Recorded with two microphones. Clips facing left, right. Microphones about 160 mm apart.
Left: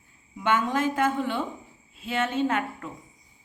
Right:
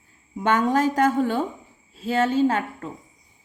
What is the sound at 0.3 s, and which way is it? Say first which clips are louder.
A woman's voice: right 4 dB; 40° right (ahead or behind).